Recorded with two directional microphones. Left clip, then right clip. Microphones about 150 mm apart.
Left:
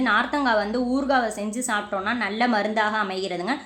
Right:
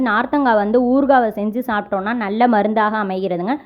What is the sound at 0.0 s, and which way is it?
A woman's voice, 60° right (ahead or behind).